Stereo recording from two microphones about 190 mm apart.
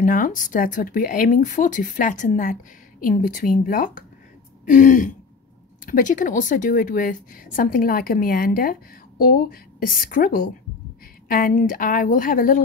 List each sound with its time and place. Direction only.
0.0 s speech: 45° left (ahead or behind)